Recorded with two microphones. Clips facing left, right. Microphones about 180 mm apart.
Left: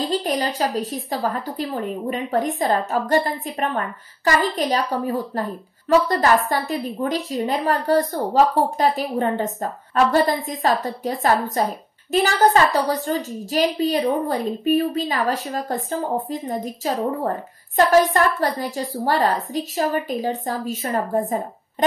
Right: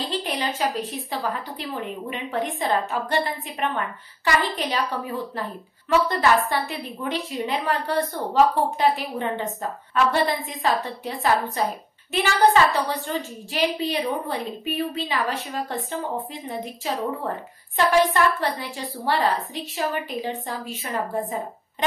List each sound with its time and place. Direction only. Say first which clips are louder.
0.0 s a woman's voice: left 5 dB; 45° left (ahead or behind)